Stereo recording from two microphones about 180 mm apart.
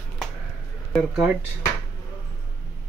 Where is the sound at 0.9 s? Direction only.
5° right (ahead or behind).